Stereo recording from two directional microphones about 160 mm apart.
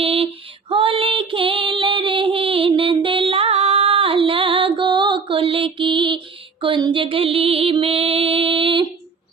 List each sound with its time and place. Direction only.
0.0 s music: 35° right (ahead or behind)
0.7 s female singing: 35° right (ahead or behind)